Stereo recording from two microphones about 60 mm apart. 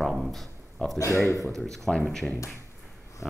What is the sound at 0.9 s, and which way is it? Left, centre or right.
Speech, left.